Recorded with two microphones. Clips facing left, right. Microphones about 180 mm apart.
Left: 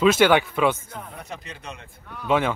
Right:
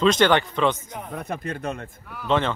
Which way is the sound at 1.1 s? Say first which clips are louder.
Right 8 dB; 55° right (ahead or behind).